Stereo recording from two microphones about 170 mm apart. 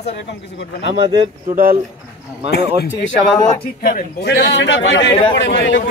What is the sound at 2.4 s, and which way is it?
Speech, 85° left.